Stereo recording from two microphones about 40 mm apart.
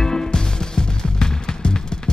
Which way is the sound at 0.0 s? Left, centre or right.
Centre.